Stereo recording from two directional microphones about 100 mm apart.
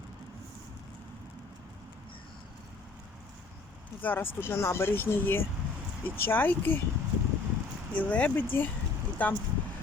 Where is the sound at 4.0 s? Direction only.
20° left (ahead or behind).